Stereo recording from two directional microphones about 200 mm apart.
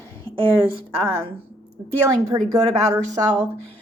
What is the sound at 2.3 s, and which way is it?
Speech, 15° right (ahead or behind).